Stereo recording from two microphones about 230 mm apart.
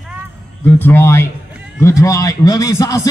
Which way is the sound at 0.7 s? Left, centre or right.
Centre.